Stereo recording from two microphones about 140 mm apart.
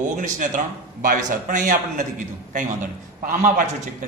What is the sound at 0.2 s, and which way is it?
A man's voice, 70° right (ahead or behind).